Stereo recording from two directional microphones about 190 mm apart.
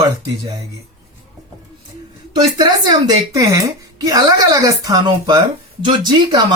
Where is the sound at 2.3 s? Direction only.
20° right (ahead or behind).